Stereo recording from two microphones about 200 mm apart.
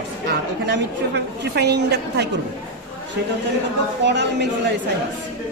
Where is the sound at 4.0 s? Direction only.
60° right (ahead or behind).